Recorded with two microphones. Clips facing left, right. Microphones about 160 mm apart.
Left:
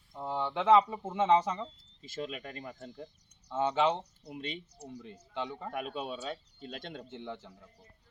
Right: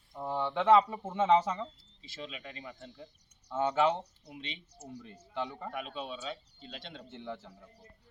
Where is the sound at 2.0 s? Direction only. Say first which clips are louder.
Left 5 dB; 45° left (ahead or behind).